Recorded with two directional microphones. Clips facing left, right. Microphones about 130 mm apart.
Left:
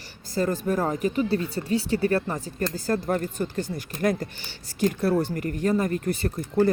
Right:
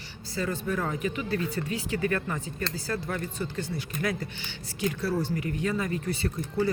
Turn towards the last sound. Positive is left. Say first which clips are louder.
# left 5 dB
turn(degrees=50)  # may be behind; listen again after turning